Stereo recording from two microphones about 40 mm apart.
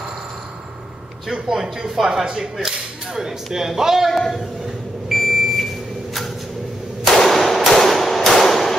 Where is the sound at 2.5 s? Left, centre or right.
Centre.